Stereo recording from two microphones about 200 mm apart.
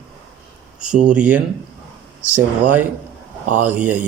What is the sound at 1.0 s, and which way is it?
Speech, 5° right (ahead or behind).